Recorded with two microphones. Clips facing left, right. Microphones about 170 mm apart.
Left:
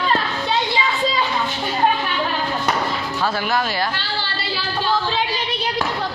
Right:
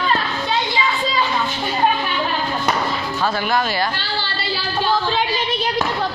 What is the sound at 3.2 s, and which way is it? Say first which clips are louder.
Speech: right 1 dB; 5° left (ahead or behind).